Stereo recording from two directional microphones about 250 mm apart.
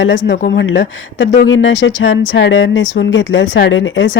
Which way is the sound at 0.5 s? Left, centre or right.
Left.